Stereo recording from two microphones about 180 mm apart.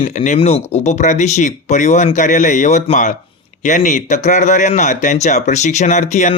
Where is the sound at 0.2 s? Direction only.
35° left (ahead or behind).